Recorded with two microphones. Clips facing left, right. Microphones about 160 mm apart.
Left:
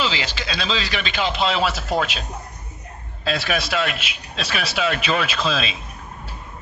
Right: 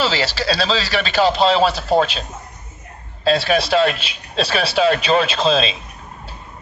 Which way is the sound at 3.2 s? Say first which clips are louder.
Right 7 dB; 30° right (ahead or behind).